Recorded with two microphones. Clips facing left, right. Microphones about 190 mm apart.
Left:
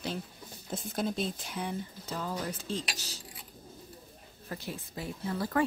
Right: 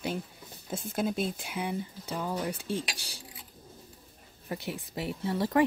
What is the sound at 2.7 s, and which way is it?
Speech, 55° right (ahead or behind).